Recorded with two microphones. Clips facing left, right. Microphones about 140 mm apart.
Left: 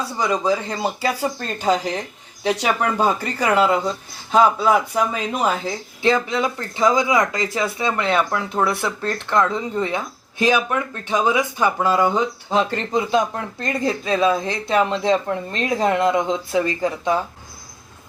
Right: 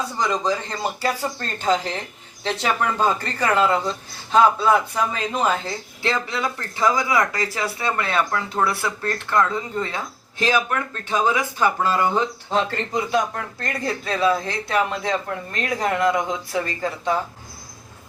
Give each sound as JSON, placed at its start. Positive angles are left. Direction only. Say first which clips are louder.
{"t": 0.2, "sound": "speech", "louder": "left 3 dB", "side_deg": 10}